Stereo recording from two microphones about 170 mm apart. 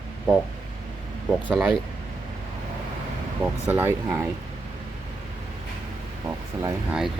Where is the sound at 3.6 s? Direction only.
10° right (ahead or behind).